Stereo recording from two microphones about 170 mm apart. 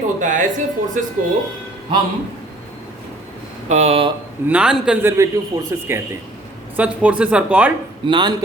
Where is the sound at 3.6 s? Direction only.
40° right (ahead or behind).